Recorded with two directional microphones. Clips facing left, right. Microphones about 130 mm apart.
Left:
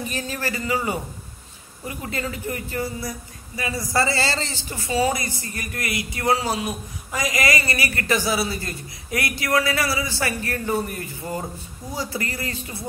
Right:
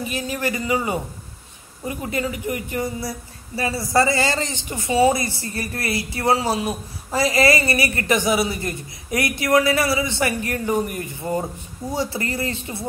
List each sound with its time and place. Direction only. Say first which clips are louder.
0.1 s speech: right 3 dB; 15° right (ahead or behind)